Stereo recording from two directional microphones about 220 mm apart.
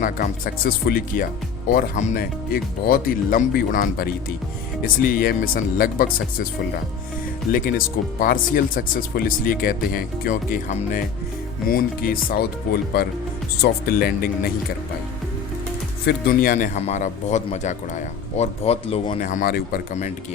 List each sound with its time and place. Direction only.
0.0 s speech: 40° left (ahead or behind)
7.5 s speech: 40° left (ahead or behind)
16.0 s speech: 45° left (ahead or behind)